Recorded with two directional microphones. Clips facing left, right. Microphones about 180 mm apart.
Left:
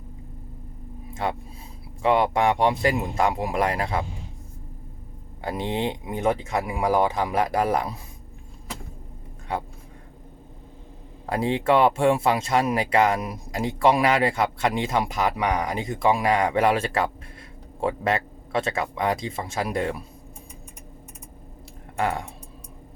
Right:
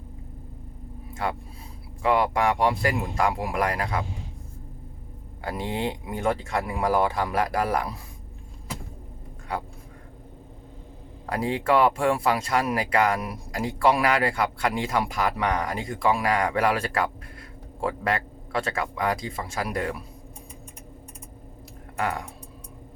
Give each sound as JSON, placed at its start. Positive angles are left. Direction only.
{"t": 1.1, "sound": "speech", "side_deg": 25}
{"t": 5.4, "sound": "speech", "side_deg": 20}
{"t": 9.5, "sound": "speech", "side_deg": 25}
{"t": 11.3, "sound": "speech", "side_deg": 25}
{"t": 21.9, "sound": "speech", "side_deg": 25}